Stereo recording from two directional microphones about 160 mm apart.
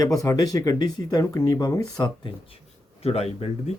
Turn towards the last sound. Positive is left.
turn(degrees=40)  # may be behind; listen again after turning